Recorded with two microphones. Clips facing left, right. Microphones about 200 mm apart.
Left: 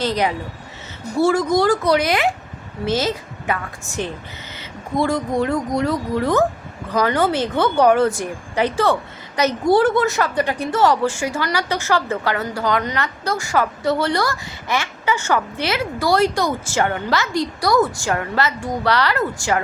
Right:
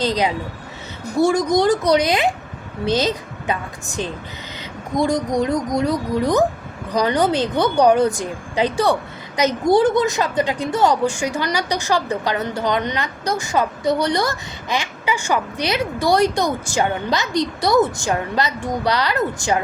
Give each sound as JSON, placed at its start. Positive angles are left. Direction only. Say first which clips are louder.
{"t": 0.0, "sound": "a woman's voice", "louder": "right 1 dB", "side_deg": -15}